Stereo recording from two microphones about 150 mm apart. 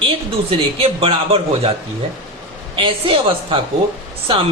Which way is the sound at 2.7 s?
35° right (ahead or behind).